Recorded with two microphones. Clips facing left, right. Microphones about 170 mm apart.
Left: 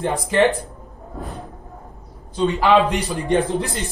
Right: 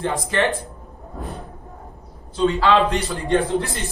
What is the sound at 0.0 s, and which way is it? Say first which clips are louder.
Speech: left 4 dB; 15° left (ahead or behind).